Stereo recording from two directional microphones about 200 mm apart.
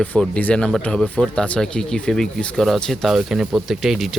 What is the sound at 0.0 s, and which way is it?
Speech, 5° left (ahead or behind).